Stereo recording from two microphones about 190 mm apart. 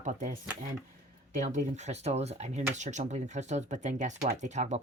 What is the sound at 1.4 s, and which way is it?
Speech, 40° right (ahead or behind).